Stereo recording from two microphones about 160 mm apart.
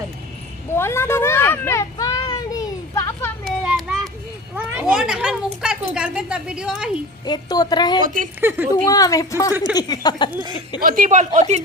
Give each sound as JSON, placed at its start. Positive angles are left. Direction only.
{"t": 0.8, "sound": "children playing", "side_deg": 15}
{"t": 3.7, "sound": "a sound", "side_deg": -5}
{"t": 4.5, "sound": "children playing", "side_deg": -5}
{"t": 5.9, "sound": "speech", "side_deg": -5}
{"t": 7.3, "sound": "a woman's voice", "side_deg": 25}
{"t": 8.0, "sound": "a woman's voice", "side_deg": -55}
{"t": 8.4, "sound": "speech", "side_deg": -10}
{"t": 8.7, "sound": "a woman's voice", "side_deg": 20}
{"t": 10.8, "sound": "a woman's voice", "side_deg": -60}